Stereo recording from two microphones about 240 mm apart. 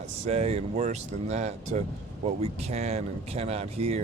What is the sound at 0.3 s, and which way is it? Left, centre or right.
Speech, right.